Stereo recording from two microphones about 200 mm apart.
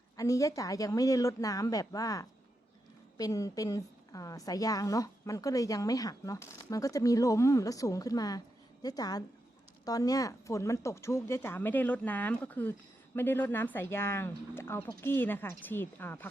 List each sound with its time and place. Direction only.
0.2 s a woman's voice: 15° left (ahead or behind)